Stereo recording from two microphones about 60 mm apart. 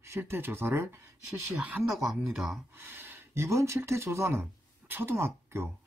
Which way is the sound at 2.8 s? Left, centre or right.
Right.